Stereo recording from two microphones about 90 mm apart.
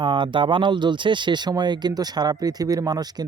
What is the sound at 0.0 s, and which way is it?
Speech, 65° right (ahead or behind).